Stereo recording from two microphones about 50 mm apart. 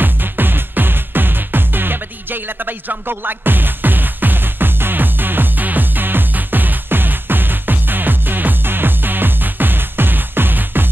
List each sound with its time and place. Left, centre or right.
0.0 s music: right